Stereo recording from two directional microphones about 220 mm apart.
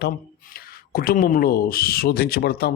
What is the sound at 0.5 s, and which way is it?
Speech, 45° left (ahead or behind).